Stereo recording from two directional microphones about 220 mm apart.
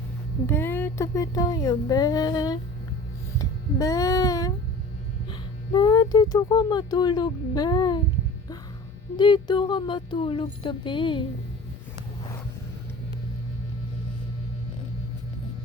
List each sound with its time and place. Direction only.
0.4 s speech: 10° left (ahead or behind)
3.3 s music: 15° left (ahead or behind)
5.3 s speech: 20° left (ahead or behind)
9.1 s speech: 20° left (ahead or behind)